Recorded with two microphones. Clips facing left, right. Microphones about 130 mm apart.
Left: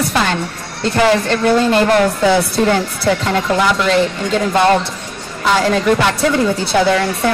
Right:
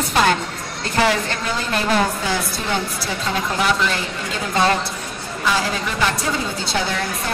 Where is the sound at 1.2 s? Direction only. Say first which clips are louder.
Left 12 dB; 70° left (ahead or behind).